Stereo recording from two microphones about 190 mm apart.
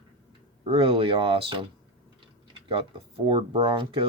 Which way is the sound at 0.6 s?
30° right (ahead or behind).